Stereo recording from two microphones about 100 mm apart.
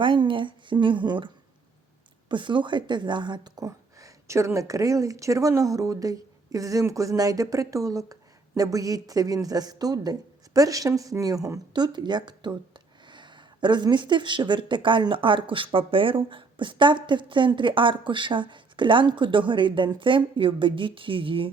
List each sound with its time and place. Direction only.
0.0 s speech: 55° right (ahead or behind)
2.3 s a woman's voice: 55° right (ahead or behind)